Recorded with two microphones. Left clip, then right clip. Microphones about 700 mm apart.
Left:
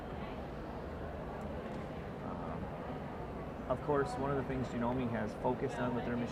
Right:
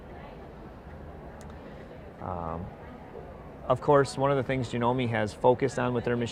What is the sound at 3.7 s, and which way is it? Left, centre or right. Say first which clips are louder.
Speech: right 11 dB; right.